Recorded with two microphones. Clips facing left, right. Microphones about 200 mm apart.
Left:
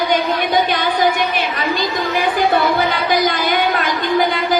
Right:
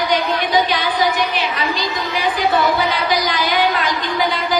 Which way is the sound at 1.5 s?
50° left (ahead or behind).